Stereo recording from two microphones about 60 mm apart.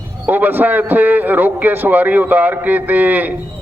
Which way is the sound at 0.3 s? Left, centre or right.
Right.